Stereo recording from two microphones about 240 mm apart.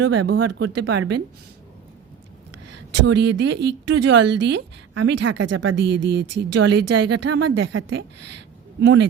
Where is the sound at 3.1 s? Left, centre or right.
Right.